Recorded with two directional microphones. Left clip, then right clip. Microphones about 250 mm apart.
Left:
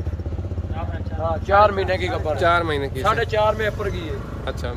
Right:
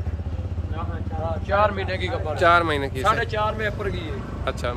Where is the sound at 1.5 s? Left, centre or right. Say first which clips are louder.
Left 5 dB; left.